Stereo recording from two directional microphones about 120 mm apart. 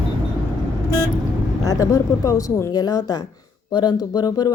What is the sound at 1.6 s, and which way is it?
A woman's voice, 25° left (ahead or behind).